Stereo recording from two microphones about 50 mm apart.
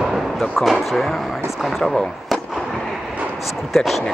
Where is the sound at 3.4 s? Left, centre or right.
Centre.